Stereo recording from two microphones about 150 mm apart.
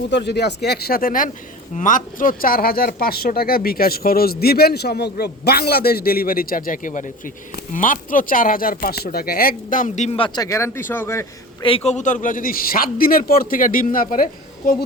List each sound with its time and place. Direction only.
0.3 s speech: 90° left; by 1.3 s 70° left (ahead or behind)
1.7 s a man's voice: 60° left (ahead or behind)
10.2 s speech: 30° left (ahead or behind)
11.6 s a man's voice: 40° left (ahead or behind); by 14.8 s 70° left (ahead or behind)